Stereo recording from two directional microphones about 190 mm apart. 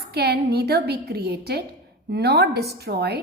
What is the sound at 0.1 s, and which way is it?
A woman's voice, 60° right (ahead or behind).